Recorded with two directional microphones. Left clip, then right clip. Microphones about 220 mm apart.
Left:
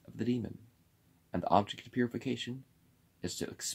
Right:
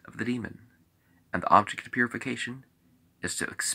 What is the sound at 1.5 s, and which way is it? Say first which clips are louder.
Speech: right 8 dB; 15° left (ahead or behind).